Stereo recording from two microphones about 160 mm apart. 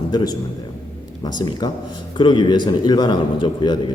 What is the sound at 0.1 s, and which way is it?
A man's voice, 25° left (ahead or behind).